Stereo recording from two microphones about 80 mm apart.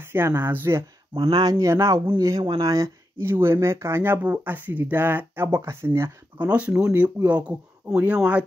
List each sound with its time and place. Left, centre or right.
0.0 s speech: right
1.1 s speech: right
1.7 s speech: right
3.2 s speech: right
6.3 s speech: centre
6.9 s speech: right
7.2 s speech: centre